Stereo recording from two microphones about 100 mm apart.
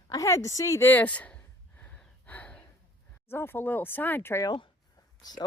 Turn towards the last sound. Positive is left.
turn(degrees=45)  # may be behind; listen again after turning